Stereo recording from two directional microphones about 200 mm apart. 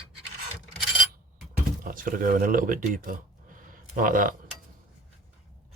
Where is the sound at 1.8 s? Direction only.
45° right (ahead or behind).